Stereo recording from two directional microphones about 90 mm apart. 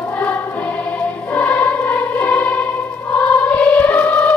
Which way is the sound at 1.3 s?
15° left (ahead or behind).